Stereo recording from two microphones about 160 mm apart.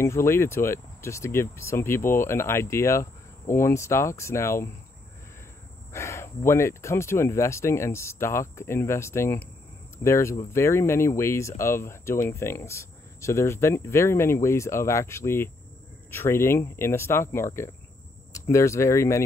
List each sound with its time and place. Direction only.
0.0 s speech: 15° left (ahead or behind)
5.9 s speech: 15° left (ahead or behind)